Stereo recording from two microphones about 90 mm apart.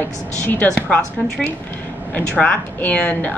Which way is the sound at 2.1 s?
15° left (ahead or behind).